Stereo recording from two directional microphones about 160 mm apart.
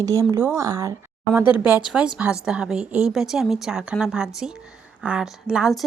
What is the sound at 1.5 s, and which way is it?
A woman's voice, 10° right (ahead or behind).